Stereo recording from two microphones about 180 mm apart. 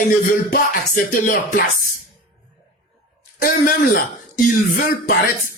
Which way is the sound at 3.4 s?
50° left (ahead or behind).